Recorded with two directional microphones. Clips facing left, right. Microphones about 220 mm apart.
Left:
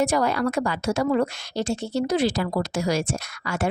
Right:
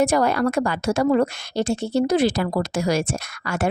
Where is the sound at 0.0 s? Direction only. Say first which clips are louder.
Right 3 dB; 50° right (ahead or behind).